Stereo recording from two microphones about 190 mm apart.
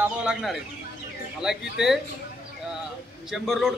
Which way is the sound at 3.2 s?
Centre (ahead or behind).